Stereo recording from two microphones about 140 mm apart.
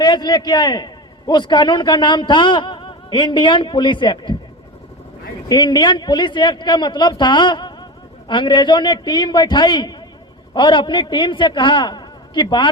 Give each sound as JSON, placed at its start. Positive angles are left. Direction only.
{"t": 0.0, "sound": "a man's voice", "side_deg": 30}
{"t": 5.5, "sound": "a man's voice", "side_deg": 30}